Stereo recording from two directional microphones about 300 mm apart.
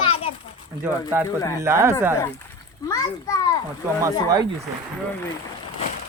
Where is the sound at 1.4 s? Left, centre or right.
Centre.